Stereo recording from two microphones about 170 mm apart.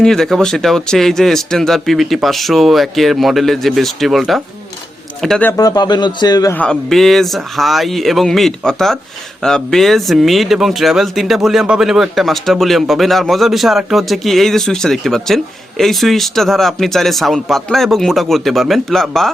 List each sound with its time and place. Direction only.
0.0 s speech: 5° left (ahead or behind)
5.5 s a man's voice: 20° left (ahead or behind)
6.6 s speech: 5° left (ahead or behind)